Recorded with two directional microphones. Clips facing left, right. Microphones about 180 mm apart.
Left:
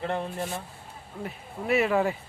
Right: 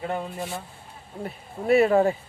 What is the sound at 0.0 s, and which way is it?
Speech, 10° right (ahead or behind).